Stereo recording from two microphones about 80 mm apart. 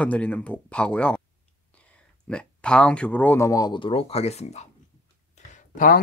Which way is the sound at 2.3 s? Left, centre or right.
Centre.